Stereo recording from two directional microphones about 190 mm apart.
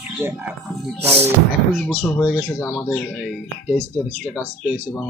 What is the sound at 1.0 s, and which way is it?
Speech, 35° right (ahead or behind).